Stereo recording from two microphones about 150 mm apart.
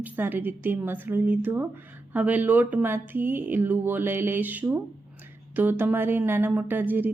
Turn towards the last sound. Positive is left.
turn(degrees=-10)  # may be behind; listen again after turning